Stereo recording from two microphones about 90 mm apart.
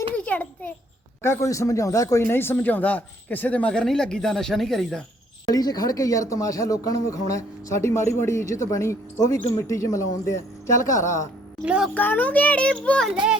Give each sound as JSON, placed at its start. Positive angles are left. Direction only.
{"t": 0.2, "sound": "a sound", "side_deg": 15}
{"t": 1.2, "sound": "speech", "side_deg": 30}
{"t": 2.2, "sound": "a man's voice", "side_deg": 25}
{"t": 5.5, "sound": "speech", "side_deg": 45}
{"t": 11.6, "sound": "speech", "side_deg": -10}
{"t": 11.9, "sound": "a man's voice", "side_deg": 20}